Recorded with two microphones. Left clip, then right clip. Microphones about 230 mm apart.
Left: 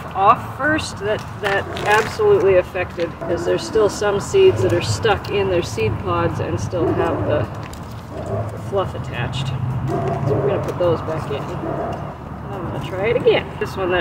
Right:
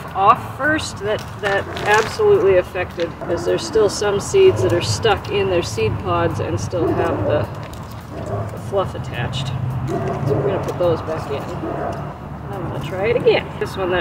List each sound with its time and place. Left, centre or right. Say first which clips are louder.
0.2 s speech: even; centre
8.7 s speech: right 1 dB; centre
12.9 s speech: even; centre